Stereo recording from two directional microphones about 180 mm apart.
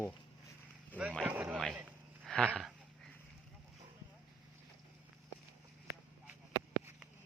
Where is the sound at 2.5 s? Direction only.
5° right (ahead or behind).